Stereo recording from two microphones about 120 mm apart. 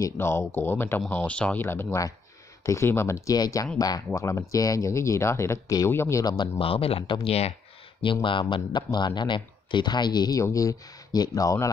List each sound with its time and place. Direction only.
0.0 s speech: 20° left (ahead or behind)
6.6 s speech: 55° left (ahead or behind)
8.0 s speech: 45° left (ahead or behind); by 11.7 s 30° left (ahead or behind)